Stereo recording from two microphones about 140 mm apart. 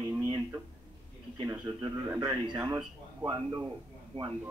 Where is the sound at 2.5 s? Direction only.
30° right (ahead or behind).